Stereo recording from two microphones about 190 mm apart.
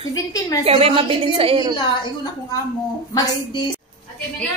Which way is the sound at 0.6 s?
30° right (ahead or behind).